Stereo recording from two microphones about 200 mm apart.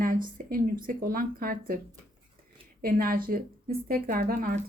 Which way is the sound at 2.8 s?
50° right (ahead or behind).